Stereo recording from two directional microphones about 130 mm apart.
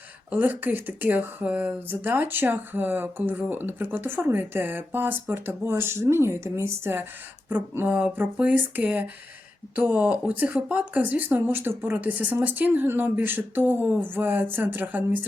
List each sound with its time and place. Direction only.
0.3 s speech: 15° right (ahead or behind)